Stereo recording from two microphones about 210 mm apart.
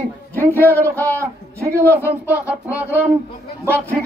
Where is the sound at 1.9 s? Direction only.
10° right (ahead or behind).